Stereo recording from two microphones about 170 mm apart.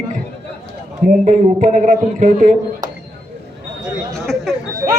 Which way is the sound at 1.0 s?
45° right (ahead or behind).